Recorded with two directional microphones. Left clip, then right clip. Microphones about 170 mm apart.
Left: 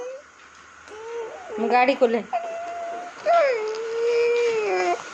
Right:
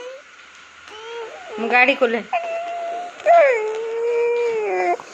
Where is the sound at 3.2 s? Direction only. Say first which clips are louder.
Right 6 dB; centre (ahead or behind).